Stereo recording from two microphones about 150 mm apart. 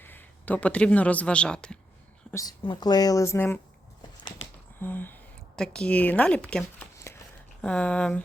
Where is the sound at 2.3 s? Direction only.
25° left (ahead or behind).